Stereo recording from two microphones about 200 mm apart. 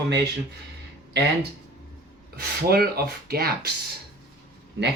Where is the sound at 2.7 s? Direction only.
50° right (ahead or behind).